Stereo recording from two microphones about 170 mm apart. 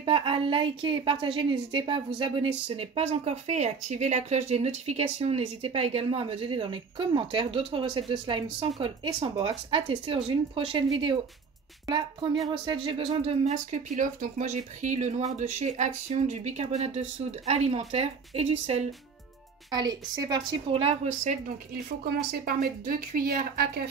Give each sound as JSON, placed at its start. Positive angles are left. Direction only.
{"t": 0.0, "sound": "a woman's voice", "side_deg": -30}
{"t": 19.7, "sound": "a woman's voice", "side_deg": -25}
{"t": 22.0, "sound": "speech", "side_deg": -65}